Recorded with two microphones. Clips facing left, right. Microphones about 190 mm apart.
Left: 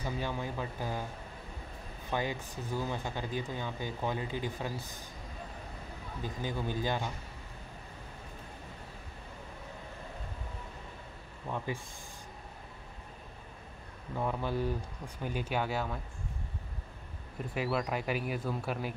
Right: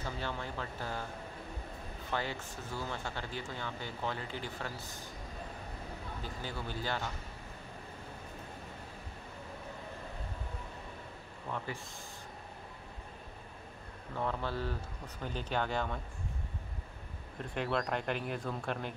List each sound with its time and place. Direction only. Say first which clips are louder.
0.0 s speech: left 3 dB; 15° left (ahead or behind)
2.0 s speech: left 3 dB; 15° left (ahead or behind)
6.2 s speech: left 7 dB; 15° left (ahead or behind)
11.5 s speech: left 2 dB; 15° left (ahead or behind)
14.1 s speech: left 3 dB; 15° left (ahead or behind)
17.4 s speech: left 2 dB; 5° left (ahead or behind)